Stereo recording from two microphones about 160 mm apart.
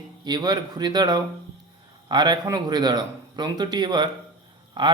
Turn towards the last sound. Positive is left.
turn(degrees=-25)  # may be behind; listen again after turning